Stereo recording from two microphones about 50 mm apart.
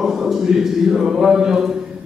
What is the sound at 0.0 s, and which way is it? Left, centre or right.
A man's voice, centre.